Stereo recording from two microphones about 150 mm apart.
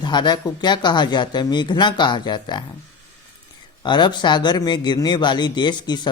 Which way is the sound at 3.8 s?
30° left (ahead or behind).